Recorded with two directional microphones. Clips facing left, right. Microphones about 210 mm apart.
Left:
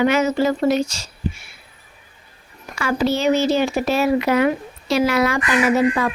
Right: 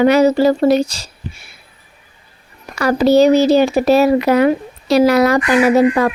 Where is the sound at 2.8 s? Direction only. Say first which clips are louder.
Right 9 dB; 40° right (ahead or behind).